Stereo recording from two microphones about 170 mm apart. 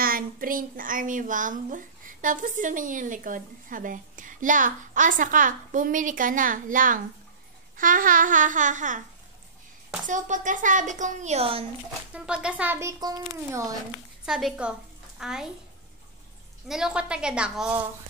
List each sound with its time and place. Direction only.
0.0 s a woman's voice: 55° right (ahead or behind)
10.0 s a woman's voice: 45° right (ahead or behind)
12.1 s speech: 5° right (ahead or behind)
14.2 s a woman's voice: 5° right (ahead or behind)
16.6 s a woman's voice: 5° right (ahead or behind)